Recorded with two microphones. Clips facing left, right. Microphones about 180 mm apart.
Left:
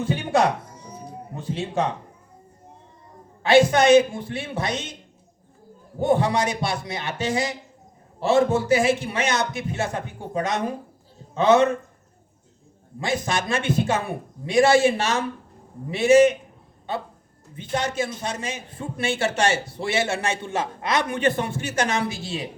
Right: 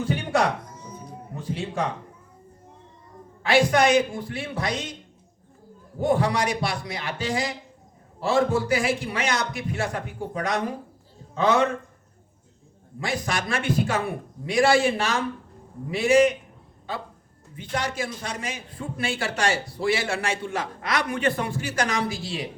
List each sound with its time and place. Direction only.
0.0 s music: 25° left (ahead or behind)
1.4 s a man's voice: 25° left (ahead or behind)
3.4 s a man's voice: 25° left (ahead or behind)
6.0 s a man's voice: 25° left (ahead or behind)
13.0 s a man's voice: 25° left (ahead or behind)
17.6 s a man's voice: 25° left (ahead or behind)